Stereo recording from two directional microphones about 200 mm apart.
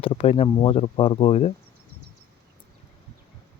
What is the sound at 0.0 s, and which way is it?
Speech, 30° left (ahead or behind).